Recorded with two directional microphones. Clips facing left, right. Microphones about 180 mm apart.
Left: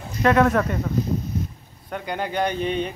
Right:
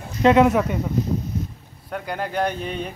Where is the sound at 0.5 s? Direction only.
10° right (ahead or behind).